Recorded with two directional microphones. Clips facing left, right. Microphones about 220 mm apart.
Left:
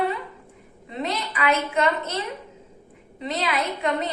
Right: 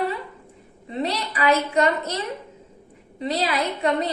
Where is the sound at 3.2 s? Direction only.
35° right (ahead or behind).